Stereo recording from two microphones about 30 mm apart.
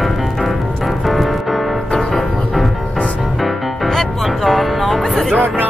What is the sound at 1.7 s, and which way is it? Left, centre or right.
Music, left.